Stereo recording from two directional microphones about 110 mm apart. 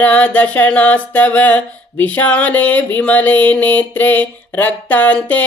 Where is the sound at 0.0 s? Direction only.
15° left (ahead or behind).